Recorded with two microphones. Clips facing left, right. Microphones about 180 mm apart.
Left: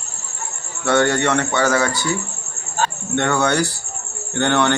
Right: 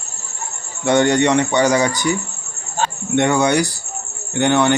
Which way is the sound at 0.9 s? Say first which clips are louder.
Right 3 dB; 20° right (ahead or behind).